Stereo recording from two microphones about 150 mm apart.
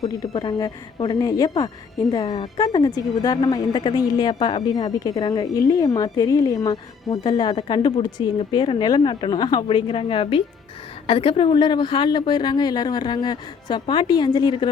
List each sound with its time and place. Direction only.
0.0 s a woman's voice: 25° left (ahead or behind)